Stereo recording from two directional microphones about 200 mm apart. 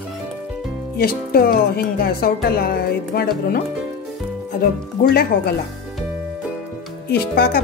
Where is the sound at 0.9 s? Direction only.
50° left (ahead or behind).